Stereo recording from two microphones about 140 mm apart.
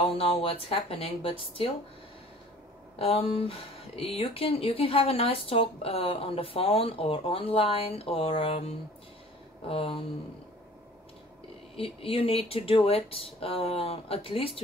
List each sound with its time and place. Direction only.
0.0 s speech: 40° left (ahead or behind)
3.0 s speech: 45° left (ahead or behind)
9.7 s a sound: 40° left (ahead or behind)
11.7 s speech: 40° left (ahead or behind)